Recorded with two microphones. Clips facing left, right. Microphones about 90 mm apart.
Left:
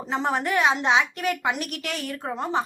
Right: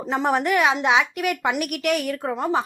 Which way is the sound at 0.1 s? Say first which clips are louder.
Right 4 dB; 15° right (ahead or behind).